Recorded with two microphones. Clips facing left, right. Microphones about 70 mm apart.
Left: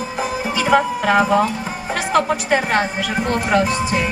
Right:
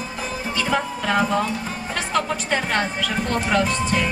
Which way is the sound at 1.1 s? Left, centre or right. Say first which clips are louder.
Left 5 dB; centre.